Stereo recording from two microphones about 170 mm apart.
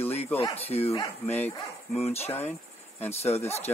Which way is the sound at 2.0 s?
40° left (ahead or behind).